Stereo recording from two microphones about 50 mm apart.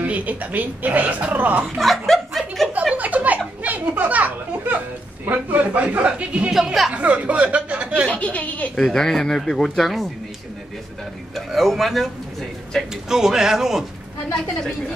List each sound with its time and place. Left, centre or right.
0.0 s speech: right
1.8 s chuckle: centre
2.9 s a sound: right
5.2 s a man's voice: right
6.5 s speech: centre
6.9 s a man's voice: right
8.1 s a woman's voice: left
8.8 s speech: centre
11.3 s a man's voice: centre
13.1 s speech: centre